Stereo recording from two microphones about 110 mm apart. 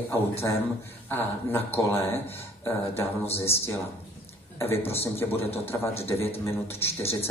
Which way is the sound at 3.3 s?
20° left (ahead or behind).